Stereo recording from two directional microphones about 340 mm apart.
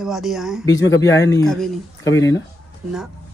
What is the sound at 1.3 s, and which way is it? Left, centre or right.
Speech, centre.